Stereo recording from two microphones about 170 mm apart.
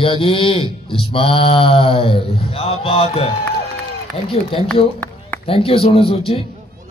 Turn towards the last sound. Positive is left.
turn(degrees=35)  # may be behind; listen again after turning